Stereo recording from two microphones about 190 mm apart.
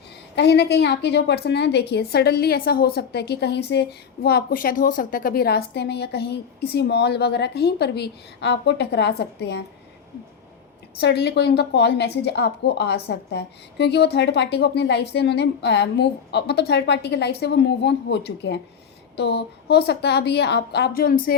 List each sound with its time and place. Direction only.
0.3 s a woman's voice: 60° left (ahead or behind)
11.0 s a woman's voice: 60° left (ahead or behind)